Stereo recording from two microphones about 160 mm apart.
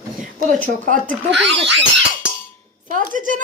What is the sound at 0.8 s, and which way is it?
Speech, 55° right (ahead or behind).